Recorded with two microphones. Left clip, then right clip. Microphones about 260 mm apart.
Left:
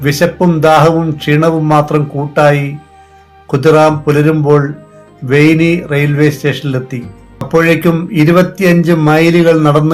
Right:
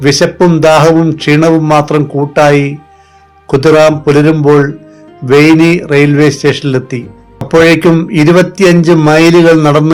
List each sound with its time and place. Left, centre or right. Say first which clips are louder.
0.0 s speech: right 4 dB; right